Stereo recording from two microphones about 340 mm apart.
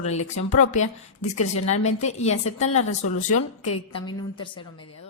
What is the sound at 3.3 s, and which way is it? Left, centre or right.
Speech, left.